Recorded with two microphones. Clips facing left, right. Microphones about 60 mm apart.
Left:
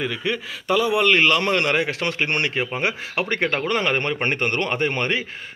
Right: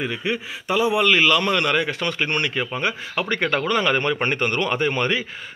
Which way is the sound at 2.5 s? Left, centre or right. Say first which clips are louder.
Even; centre.